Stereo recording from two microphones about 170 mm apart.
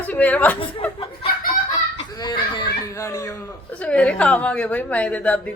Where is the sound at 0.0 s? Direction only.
10° left (ahead or behind).